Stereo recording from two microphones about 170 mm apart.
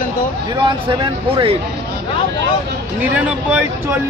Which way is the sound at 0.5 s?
25° right (ahead or behind).